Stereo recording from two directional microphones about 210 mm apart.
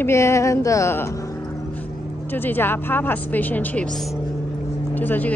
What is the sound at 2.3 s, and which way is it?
Speech, 10° left (ahead or behind).